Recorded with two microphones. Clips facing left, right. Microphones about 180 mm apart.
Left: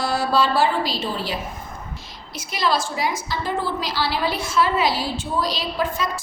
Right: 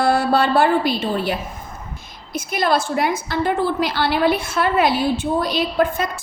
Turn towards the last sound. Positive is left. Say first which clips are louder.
# right 6 dB
turn(degrees=-55)  # may be behind; listen again after turning